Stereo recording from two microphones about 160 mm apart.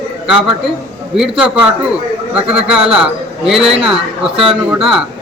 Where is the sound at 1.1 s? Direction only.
5° right (ahead or behind).